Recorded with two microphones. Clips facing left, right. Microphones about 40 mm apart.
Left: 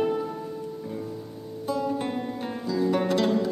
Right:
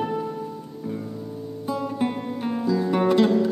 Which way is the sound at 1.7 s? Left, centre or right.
Centre.